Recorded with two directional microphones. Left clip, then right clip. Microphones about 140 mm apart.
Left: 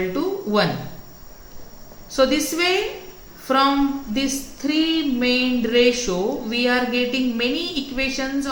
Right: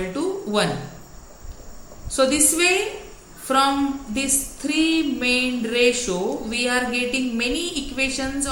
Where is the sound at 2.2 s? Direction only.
60° left (ahead or behind).